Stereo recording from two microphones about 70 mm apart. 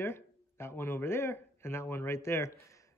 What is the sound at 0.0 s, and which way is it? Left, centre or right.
Speech, left.